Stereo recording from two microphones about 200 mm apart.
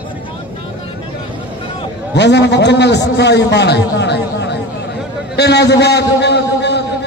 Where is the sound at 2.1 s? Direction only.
60° left (ahead or behind).